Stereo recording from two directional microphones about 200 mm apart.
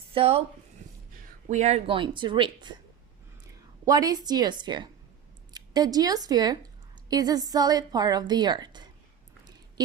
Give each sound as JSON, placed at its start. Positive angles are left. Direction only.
{"t": 0.1, "sound": "speech", "side_deg": -30}
{"t": 1.5, "sound": "a woman's voice", "side_deg": -35}